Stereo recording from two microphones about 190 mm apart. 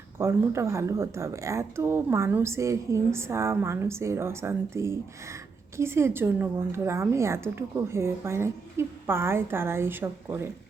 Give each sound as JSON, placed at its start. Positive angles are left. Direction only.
{"t": 0.2, "sound": "speech", "side_deg": -15}